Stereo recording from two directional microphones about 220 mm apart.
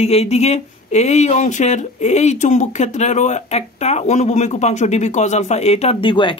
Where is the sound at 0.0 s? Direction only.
30° left (ahead or behind).